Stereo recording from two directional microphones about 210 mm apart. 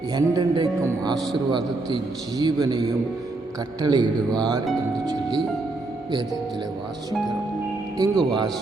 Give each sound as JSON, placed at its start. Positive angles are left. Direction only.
{"t": 0.1, "sound": "a man's voice", "side_deg": -20}
{"t": 8.1, "sound": "speech", "side_deg": 0}